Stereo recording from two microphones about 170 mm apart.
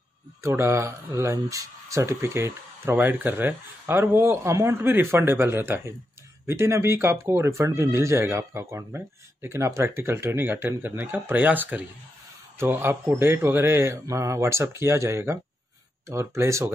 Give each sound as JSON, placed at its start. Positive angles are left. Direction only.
{"t": 0.4, "sound": "speech", "side_deg": -15}